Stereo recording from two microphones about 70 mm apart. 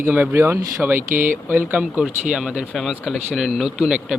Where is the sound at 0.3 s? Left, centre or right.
Right.